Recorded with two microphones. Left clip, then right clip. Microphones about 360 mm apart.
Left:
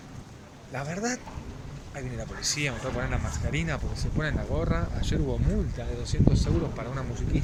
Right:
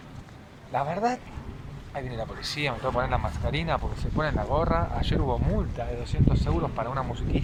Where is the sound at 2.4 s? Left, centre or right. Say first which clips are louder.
Right 1 dB; centre.